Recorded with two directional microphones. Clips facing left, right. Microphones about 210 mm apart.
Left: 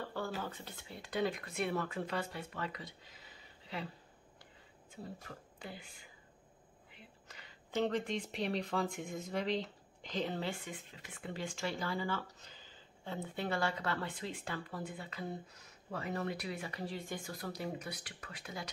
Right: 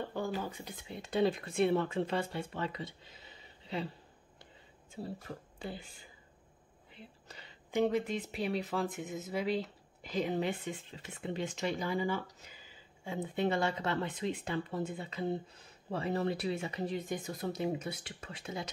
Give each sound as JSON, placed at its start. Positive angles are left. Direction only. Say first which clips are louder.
{"t": 0.0, "sound": "speech", "louder": "right 4 dB", "side_deg": -15}
{"t": 5.0, "sound": "speech", "louder": "right 6 dB", "side_deg": -35}
{"t": 7.2, "sound": "a sound", "louder": "right 4 dB", "side_deg": -30}
{"t": 7.7, "sound": "speech", "louder": "right 4 dB", "side_deg": -10}